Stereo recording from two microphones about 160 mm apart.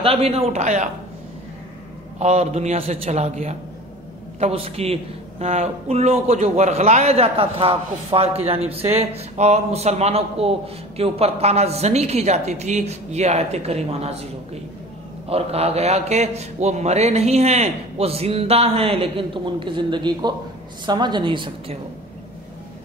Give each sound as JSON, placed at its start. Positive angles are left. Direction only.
{"t": 0.0, "sound": "a man's voice", "side_deg": -40}
{"t": 2.1, "sound": "a man's voice", "side_deg": -45}